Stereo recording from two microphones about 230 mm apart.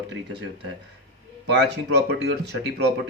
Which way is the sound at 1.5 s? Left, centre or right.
Right.